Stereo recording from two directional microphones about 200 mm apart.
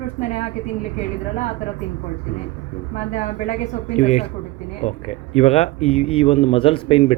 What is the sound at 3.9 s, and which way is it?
A man's voice, 35° left (ahead or behind).